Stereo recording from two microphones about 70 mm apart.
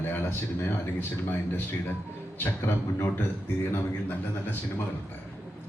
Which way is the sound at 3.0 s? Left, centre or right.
Left.